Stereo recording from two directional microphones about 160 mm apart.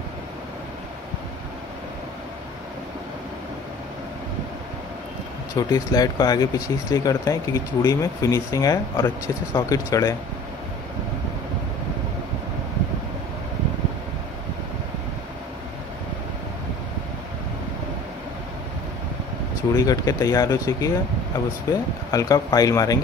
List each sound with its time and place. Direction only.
5.6 s speech: 25° left (ahead or behind)
19.7 s speech: 20° left (ahead or behind)